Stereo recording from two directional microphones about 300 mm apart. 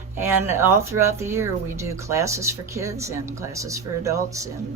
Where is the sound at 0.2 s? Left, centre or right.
Centre.